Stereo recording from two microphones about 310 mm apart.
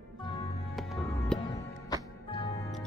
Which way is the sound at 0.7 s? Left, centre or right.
Centre.